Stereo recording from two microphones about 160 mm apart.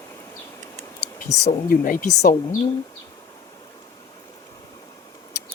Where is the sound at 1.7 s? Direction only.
60° left (ahead or behind).